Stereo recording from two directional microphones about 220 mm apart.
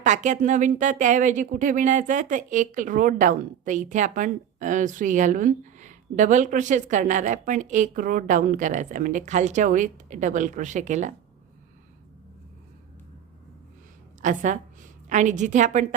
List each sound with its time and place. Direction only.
0.0 s speech: 35° right (ahead or behind)
14.2 s a woman's voice: 35° right (ahead or behind)